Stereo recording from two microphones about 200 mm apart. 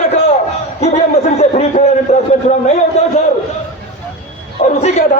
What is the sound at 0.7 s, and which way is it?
Speech, 35° left (ahead or behind).